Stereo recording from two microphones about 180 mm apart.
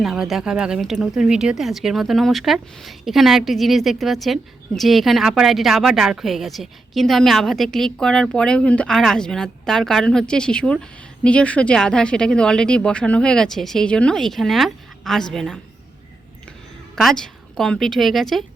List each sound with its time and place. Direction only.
0.0 s speech: centre (ahead or behind)
16.9 s a woman's voice: centre (ahead or behind)